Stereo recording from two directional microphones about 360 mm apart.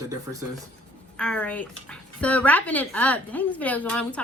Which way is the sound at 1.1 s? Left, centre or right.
Centre.